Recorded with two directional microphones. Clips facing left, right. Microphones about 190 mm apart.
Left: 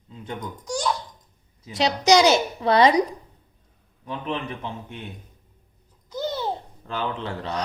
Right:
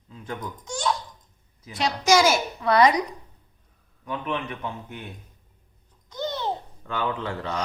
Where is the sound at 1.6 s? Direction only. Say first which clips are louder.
Left 3 dB; 20° left (ahead or behind).